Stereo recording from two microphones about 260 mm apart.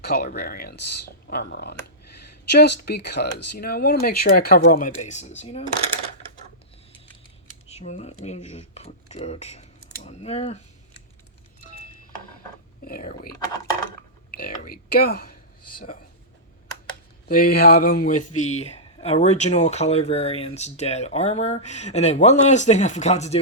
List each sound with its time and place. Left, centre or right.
0.0 s speech: left
7.7 s speech: left
12.8 s speech: left
14.3 s speech: left
17.2 s speech: left